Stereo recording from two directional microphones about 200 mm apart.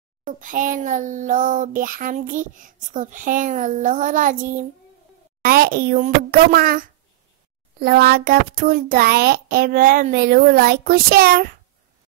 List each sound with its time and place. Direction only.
0.2 s a child's voice: 40° right (ahead or behind)
7.8 s a child's voice: 50° right (ahead or behind)